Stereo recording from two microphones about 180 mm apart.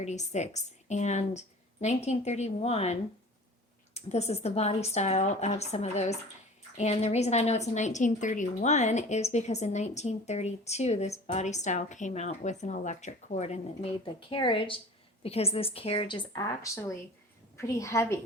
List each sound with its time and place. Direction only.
0.0 s a woman's voice: 40° left (ahead or behind); by 18.2 s 15° left (ahead or behind)